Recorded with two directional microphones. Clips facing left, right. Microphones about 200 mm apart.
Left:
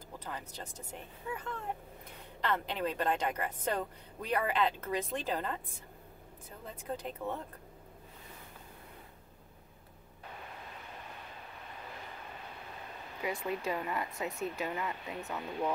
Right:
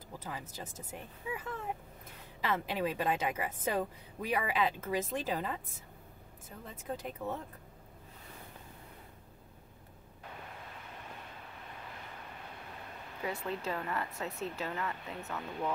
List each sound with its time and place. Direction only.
0.2 s a woman's voice: 5° right (ahead or behind)
6.6 s a woman's voice: centre (ahead or behind)
13.2 s speech: 10° left (ahead or behind)